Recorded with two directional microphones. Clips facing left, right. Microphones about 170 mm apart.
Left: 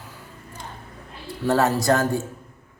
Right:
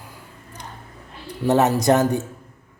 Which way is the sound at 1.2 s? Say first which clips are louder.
Right 2 dB; 20° right (ahead or behind).